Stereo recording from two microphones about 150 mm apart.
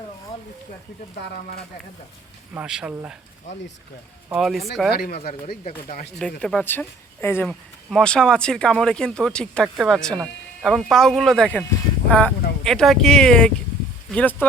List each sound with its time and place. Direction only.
1.2 s speech: 90° left
2.6 s speech: 5° right (ahead or behind)
4.3 s speech: centre (ahead or behind)
4.9 s speech: 90° left
5.3 s speech: 45° left (ahead or behind)
6.4 s speech: 5° left (ahead or behind)
7.9 s speech: 5° left (ahead or behind)